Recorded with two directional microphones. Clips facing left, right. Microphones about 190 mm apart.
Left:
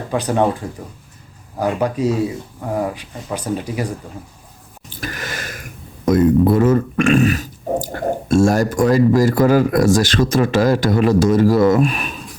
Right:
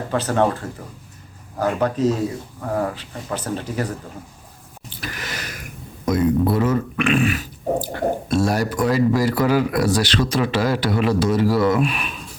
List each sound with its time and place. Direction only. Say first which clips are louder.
0.1 s speech: left 2 dB; 15° left (ahead or behind)
4.9 s a sound: left 4 dB; 50° left (ahead or behind)
6.1 s speech: left 5 dB; 50° left (ahead or behind)